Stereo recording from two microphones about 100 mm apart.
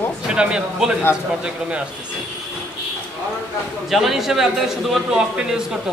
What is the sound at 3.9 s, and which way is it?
A man's voice, 5° right (ahead or behind).